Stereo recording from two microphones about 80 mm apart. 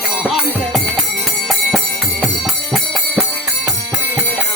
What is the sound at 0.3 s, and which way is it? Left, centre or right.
Music, centre.